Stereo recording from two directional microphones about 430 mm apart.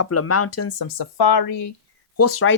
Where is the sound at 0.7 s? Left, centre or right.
Left.